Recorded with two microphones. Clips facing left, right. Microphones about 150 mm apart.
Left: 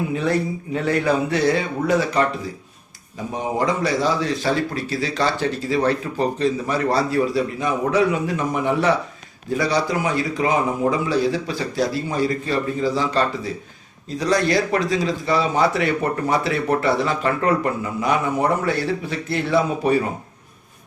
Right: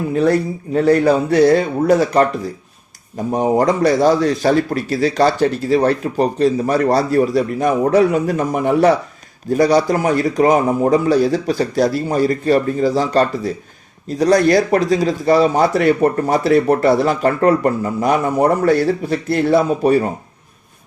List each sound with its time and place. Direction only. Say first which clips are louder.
0.1 s speech: right 6 dB; 45° right (ahead or behind)
3.3 s a man's voice: right 7 dB; 45° right (ahead or behind)